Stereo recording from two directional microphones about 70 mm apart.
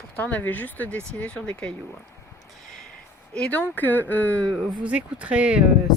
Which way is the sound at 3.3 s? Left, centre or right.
Centre.